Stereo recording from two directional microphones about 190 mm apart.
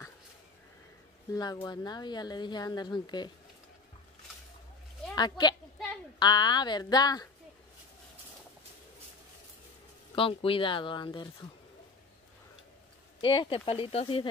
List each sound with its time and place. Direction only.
1.3 s speech: 20° left (ahead or behind)
5.1 s speech: 20° left (ahead or behind)
10.1 s speech: 30° left (ahead or behind)
13.2 s speech: 25° left (ahead or behind)